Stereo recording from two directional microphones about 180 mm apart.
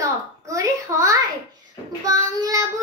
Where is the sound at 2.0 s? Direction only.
20° right (ahead or behind).